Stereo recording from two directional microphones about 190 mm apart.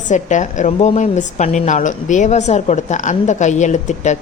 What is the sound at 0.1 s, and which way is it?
A woman's voice, 40° left (ahead or behind).